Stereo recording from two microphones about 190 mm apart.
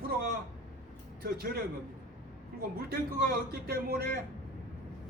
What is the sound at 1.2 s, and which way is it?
Speech, 50° right (ahead or behind).